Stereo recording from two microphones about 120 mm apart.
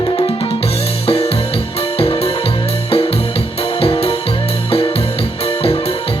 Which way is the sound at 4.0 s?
55° left (ahead or behind).